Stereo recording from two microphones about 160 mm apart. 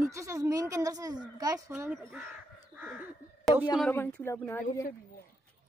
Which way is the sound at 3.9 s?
10° left (ahead or behind).